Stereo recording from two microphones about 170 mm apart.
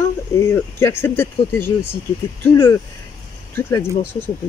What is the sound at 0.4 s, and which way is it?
Speech, 15° left (ahead or behind).